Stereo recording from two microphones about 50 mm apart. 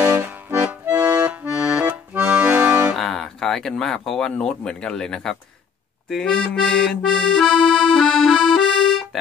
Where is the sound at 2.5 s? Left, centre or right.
Right.